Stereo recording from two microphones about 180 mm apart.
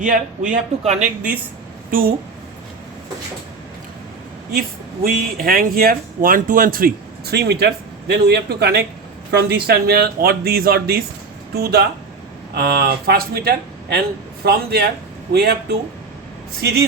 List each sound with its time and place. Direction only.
0.0 s a man's voice: 45° right (ahead or behind)
1.9 s a woman's voice: 55° right (ahead or behind)
5.0 s speech: 55° right (ahead or behind)